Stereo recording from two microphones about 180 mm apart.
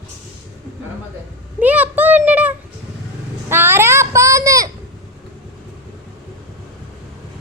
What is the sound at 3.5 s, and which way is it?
Child singing, 10° right (ahead or behind).